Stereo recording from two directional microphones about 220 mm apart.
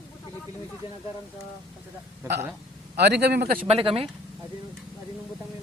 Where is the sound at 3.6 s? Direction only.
25° right (ahead or behind).